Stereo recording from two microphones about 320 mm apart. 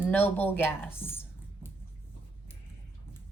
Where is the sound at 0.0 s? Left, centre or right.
Centre.